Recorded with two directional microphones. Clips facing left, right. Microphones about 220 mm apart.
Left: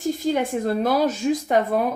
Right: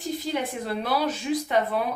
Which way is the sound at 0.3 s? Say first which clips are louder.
Left 8 dB; 45° left (ahead or behind).